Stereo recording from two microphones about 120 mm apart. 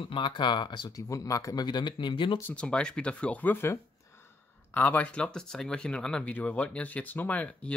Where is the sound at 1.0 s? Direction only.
25° left (ahead or behind).